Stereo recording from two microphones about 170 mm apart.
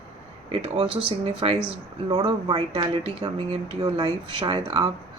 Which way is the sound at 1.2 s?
35° right (ahead or behind).